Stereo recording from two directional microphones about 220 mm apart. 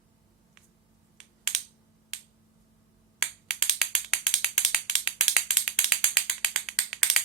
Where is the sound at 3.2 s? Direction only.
5° right (ahead or behind).